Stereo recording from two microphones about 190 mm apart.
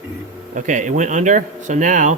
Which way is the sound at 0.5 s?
40° right (ahead or behind).